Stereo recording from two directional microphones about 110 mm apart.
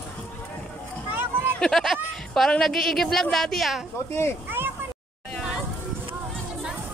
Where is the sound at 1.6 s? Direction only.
5° left (ahead or behind).